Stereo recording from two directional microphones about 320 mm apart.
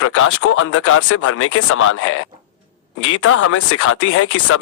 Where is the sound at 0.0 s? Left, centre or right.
Left.